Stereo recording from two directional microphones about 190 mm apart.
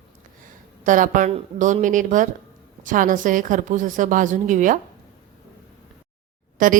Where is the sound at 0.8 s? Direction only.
45° right (ahead or behind).